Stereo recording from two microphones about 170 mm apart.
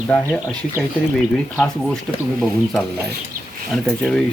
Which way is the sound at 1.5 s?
5° left (ahead or behind).